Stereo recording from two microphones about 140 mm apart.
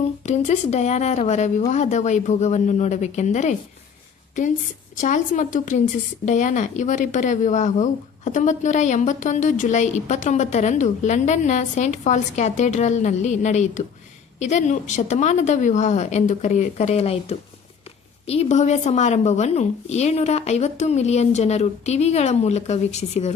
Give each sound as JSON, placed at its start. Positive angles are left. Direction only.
{"t": 0.3, "sound": "a woman's voice", "side_deg": 55}
{"t": 4.9, "sound": "a woman's voice", "side_deg": 65}